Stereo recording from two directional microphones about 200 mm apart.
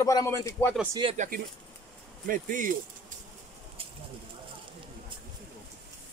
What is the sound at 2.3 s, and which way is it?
Speech, 40° right (ahead or behind).